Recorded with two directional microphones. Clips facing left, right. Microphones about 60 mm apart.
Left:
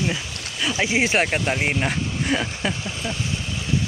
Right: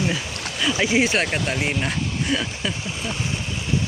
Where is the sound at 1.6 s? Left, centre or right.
Left.